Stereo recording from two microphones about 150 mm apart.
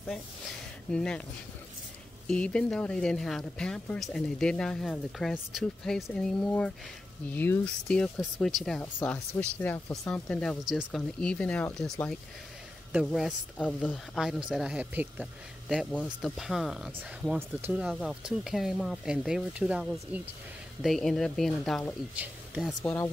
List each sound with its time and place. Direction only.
0.9 s speech: 5° left (ahead or behind)
2.2 s speech: 5° left (ahead or behind)
13.0 s speech: 5° left (ahead or behind)
15.9 s speech: 5° left (ahead or behind)
22.1 s speech: 10° right (ahead or behind)